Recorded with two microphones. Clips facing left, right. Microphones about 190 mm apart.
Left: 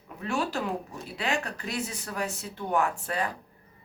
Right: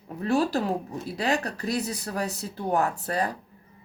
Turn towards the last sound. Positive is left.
turn(degrees=-35)  # may be behind; listen again after turning